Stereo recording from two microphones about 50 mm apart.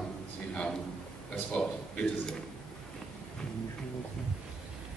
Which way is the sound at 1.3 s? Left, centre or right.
Left.